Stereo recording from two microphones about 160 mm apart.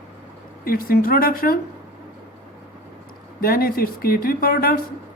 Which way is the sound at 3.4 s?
65° left (ahead or behind).